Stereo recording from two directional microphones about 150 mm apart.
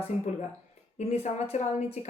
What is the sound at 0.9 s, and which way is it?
Speech, 50° left (ahead or behind).